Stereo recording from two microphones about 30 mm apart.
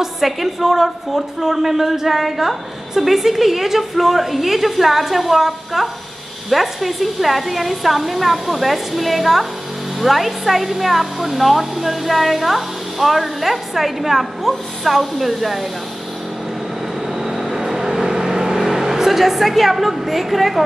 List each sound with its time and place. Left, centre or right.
0.0 s a woman's voice: centre
17.2 s vehicle: centre
18.6 s a woman's voice: centre